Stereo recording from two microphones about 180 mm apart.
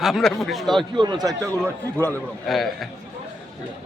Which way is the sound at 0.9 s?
25° right (ahead or behind).